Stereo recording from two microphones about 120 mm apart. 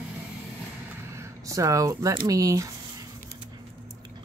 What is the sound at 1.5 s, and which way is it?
Speech, 25° right (ahead or behind).